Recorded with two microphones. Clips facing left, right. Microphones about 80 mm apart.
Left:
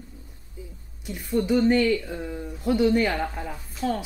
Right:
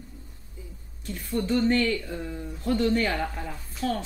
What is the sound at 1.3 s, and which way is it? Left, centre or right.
Speech, centre.